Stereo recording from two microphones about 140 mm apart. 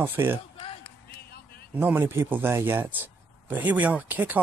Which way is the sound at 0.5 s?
40° left (ahead or behind).